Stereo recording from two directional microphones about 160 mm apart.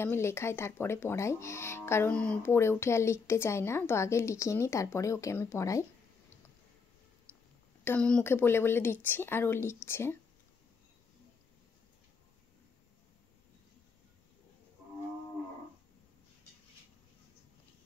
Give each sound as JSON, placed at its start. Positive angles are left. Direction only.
{"t": 0.0, "sound": "speech", "side_deg": 15}
{"t": 7.8, "sound": "speech", "side_deg": 10}